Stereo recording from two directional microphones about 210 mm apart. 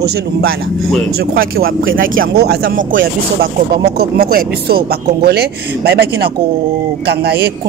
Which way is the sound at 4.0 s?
45° right (ahead or behind).